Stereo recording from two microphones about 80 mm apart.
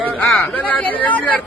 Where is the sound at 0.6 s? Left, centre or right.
Centre.